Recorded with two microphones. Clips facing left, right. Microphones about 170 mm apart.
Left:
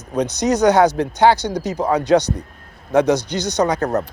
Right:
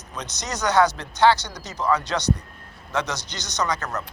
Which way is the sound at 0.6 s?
60° left (ahead or behind).